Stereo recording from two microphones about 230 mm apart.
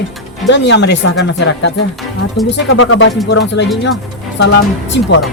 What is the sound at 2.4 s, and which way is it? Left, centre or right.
Speech, left.